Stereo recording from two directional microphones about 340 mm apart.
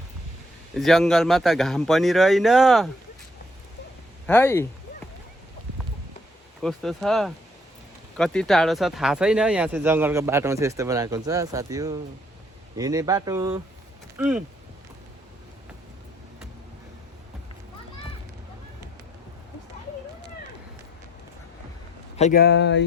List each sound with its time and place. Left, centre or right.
0.8 s speech: centre
4.3 s speech: centre
6.6 s speech: centre
22.2 s speech: left